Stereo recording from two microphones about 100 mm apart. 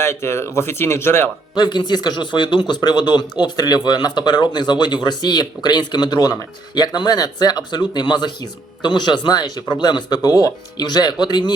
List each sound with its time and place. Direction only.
0.0 s speech: 25° left (ahead or behind)
1.5 s speech: 45° left (ahead or behind)